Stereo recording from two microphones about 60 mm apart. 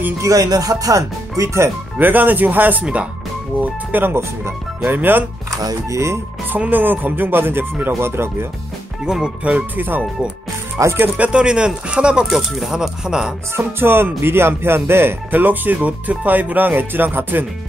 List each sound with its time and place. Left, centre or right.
0.2 s speech: right
2.0 s speech: right
2.8 s speech: centre
3.6 s speech: right
5.6 s speech: right
6.5 s speech: right
9.0 s speech: centre
9.8 s speech: right
10.8 s speech: right
11.1 s speech: centre
12.3 s speech: centre
13.6 s speech: right